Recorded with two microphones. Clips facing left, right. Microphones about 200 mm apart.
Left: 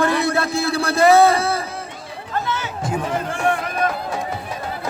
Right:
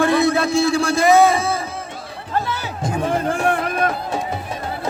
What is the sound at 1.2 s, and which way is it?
Music, 15° right (ahead or behind).